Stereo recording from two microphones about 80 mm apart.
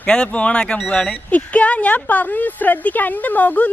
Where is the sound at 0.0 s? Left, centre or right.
Centre.